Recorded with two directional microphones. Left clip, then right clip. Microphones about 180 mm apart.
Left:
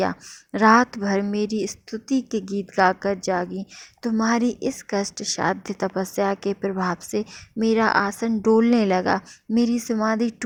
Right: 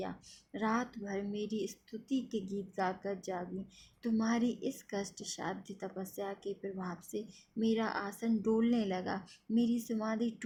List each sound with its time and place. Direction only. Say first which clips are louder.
0.0 s a woman's voice: left 18 dB; 55° left (ahead or behind)